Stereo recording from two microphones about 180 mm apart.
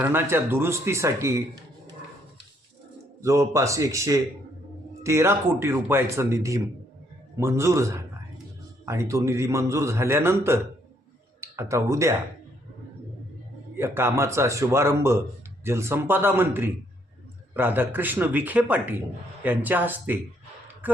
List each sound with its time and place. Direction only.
0.0 s a man's voice: 10° right (ahead or behind)
3.2 s a man's voice: 15° right (ahead or behind)
13.7 s a man's voice: 15° right (ahead or behind)